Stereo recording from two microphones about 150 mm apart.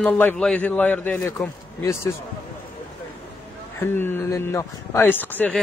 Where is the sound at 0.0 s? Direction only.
10° left (ahead or behind).